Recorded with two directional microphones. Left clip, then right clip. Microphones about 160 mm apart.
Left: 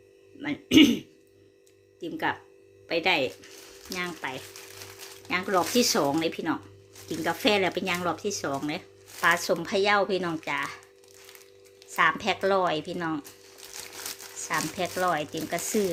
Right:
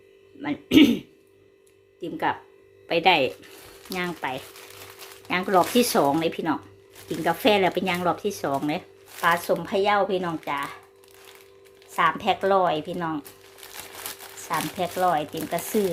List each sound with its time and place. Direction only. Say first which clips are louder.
0.4 s speech: right 2 dB; 5° right (ahead or behind)
2.8 s speech: right 5 dB; 15° right (ahead or behind)
9.2 s speech: right 2 dB; 5° left (ahead or behind)
11.9 s speech: right 2 dB; centre (ahead or behind)
14.4 s speech: right 2 dB; 5° left (ahead or behind)